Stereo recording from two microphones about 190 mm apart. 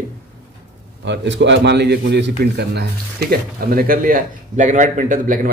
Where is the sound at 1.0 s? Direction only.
65° right (ahead or behind).